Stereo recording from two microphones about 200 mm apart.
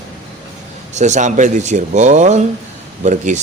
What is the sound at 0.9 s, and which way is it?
Speech, 35° right (ahead or behind).